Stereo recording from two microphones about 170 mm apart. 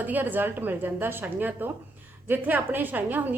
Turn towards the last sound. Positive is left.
turn(degrees=-10)  # may be behind; listen again after turning